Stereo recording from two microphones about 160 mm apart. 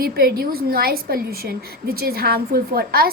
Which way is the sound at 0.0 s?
70° right (ahead or behind).